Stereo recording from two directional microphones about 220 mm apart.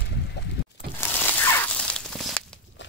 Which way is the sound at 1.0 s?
10° left (ahead or behind).